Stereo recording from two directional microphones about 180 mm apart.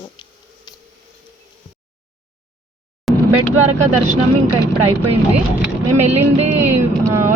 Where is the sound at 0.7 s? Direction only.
20° left (ahead or behind).